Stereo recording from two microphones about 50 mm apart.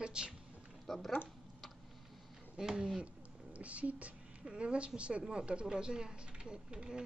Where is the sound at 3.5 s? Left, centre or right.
Right.